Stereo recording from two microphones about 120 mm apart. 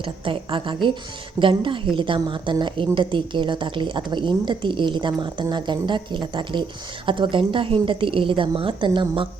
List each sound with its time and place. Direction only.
0.0 s a woman's voice: 45° right (ahead or behind)